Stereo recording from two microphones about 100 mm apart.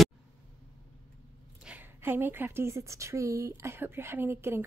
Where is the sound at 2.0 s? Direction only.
25° right (ahead or behind).